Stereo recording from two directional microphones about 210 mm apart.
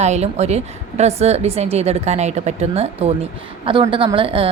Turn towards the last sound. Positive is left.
turn(degrees=-25)  # may be behind; listen again after turning